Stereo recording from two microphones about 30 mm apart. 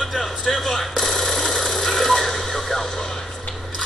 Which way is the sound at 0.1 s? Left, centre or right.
Centre.